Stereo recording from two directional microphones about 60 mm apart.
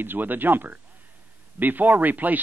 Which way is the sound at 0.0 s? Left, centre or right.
Right.